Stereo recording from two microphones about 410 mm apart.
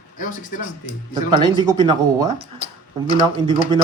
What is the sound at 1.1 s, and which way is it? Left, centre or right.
Speech, centre.